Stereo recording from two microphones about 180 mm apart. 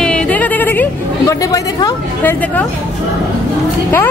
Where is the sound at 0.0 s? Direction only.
5° left (ahead or behind).